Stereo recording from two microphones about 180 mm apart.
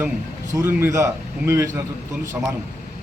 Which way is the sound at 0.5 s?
15° right (ahead or behind).